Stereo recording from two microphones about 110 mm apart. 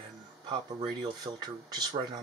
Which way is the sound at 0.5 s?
45° right (ahead or behind).